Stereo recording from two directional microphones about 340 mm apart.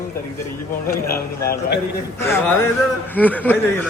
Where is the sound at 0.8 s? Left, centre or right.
Left.